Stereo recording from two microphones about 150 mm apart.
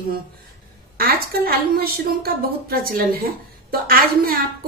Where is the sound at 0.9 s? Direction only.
90° right.